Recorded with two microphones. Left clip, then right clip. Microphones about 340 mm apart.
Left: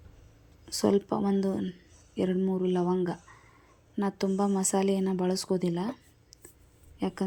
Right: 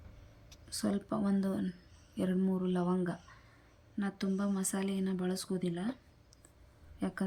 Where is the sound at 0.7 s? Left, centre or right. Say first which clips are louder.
Left 10 dB; centre.